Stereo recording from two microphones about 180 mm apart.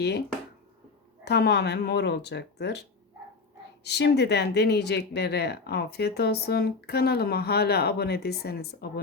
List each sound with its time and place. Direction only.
1.2 s speech: 65° left (ahead or behind)
3.8 s speech: 70° left (ahead or behind)